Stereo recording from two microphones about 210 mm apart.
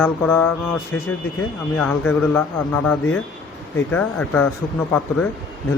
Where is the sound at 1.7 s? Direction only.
5° left (ahead or behind).